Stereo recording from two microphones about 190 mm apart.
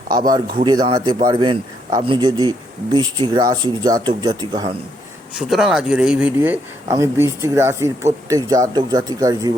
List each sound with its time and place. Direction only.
0.3 s speech: 25° right (ahead or behind)
5.4 s speech: centre (ahead or behind); by 9.5 s 20° right (ahead or behind)